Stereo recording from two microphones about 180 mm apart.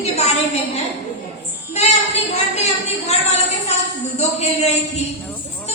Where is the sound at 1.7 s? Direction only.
35° left (ahead or behind).